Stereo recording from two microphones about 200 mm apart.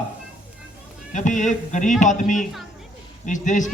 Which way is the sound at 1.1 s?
40° left (ahead or behind).